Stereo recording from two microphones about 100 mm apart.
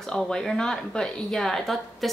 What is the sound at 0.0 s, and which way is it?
A woman's voice, 5° left (ahead or behind).